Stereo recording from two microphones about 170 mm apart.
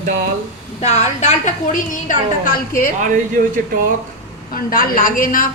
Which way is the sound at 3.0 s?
50° right (ahead or behind).